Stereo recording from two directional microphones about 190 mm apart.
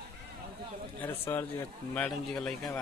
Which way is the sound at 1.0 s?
10° left (ahead or behind).